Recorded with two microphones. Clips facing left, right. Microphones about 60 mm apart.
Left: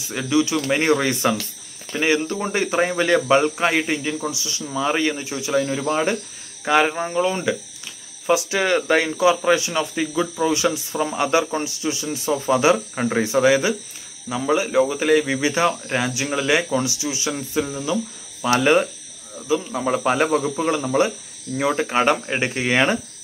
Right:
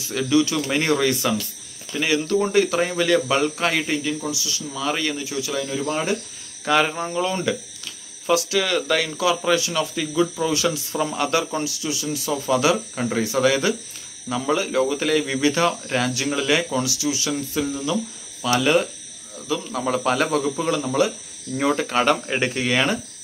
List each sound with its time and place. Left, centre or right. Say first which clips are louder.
0.1 s speech: even; centre; by 6.1 s left
6.6 s speech: left 2 dB; centre
19.4 s speech: left 3 dB; centre
21.5 s speech: left 1 dB; centre